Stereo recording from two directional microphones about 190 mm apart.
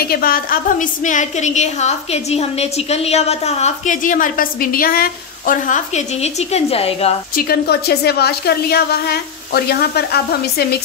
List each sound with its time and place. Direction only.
0.0 s a woman's voice: 50° left (ahead or behind); by 7.2 s 30° left (ahead or behind)
7.3 s a woman's voice: 55° left (ahead or behind)